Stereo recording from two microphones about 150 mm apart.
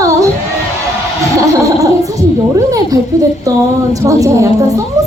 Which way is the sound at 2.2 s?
25° right (ahead or behind).